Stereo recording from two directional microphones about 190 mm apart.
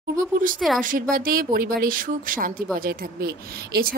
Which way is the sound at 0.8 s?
45° right (ahead or behind).